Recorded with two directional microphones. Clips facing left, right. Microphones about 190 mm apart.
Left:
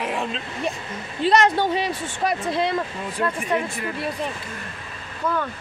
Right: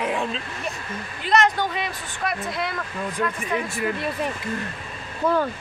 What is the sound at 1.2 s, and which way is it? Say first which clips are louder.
Speech: left 3 dB; 30° left (ahead or behind).